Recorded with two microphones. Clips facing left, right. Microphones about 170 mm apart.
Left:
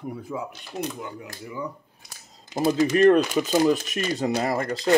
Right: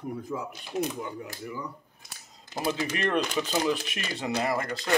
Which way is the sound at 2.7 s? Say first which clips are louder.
Left 11 dB; 40° left (ahead or behind).